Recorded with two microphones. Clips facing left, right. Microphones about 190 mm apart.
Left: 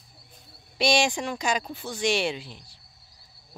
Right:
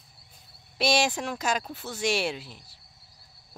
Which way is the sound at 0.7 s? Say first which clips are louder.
Left 2 dB; 5° right (ahead or behind).